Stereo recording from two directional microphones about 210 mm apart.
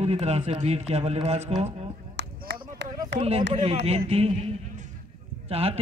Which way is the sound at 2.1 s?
60° right (ahead or behind).